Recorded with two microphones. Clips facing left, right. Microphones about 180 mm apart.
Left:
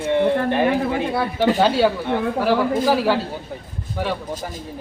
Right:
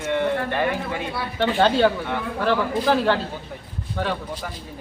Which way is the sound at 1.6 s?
5° left (ahead or behind).